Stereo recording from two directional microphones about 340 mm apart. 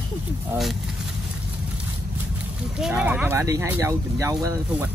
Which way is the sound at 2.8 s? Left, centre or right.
Centre.